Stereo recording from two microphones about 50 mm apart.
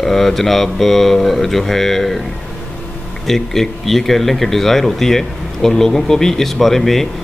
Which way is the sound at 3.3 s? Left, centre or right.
Centre.